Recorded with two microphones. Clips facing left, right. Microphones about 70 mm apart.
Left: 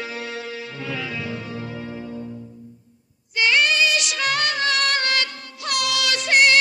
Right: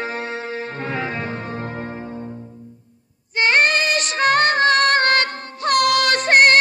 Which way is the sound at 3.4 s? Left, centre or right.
Right.